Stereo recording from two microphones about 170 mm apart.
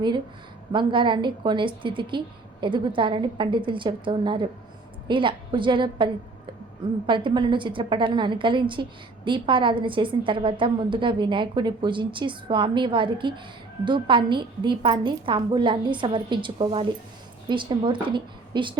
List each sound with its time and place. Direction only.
0.7 s a woman's voice: 30° right (ahead or behind)
7.1 s a woman's voice: 30° right (ahead or behind)